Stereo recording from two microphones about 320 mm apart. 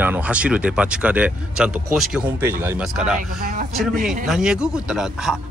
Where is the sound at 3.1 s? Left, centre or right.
Right.